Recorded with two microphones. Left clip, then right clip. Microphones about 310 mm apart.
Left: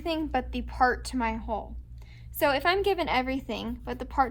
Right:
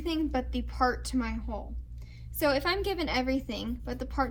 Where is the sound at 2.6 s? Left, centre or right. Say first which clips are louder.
Left 5 dB; left.